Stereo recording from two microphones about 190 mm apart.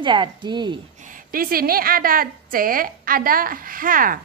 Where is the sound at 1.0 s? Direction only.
45° right (ahead or behind).